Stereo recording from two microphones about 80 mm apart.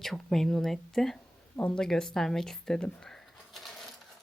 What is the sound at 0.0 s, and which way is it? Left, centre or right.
Speech, centre.